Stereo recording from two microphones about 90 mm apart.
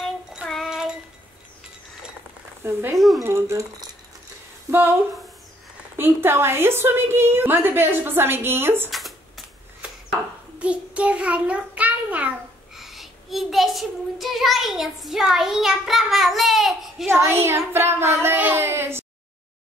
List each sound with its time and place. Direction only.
0.0 s child singing: 5° right (ahead or behind)
2.6 s a woman's voice: 25° right (ahead or behind)
4.6 s speech: 25° right (ahead or behind)
5.9 s a woman's voice: 25° right (ahead or behind)
10.6 s child singing: 15° right (ahead or behind)
12.7 s child singing: 5° right (ahead or behind)
17.1 s a woman's voice: 30° right (ahead or behind)